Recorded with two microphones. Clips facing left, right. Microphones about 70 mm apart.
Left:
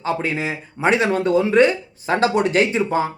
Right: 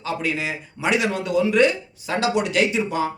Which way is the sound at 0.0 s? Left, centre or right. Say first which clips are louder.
Left 3 dB; left.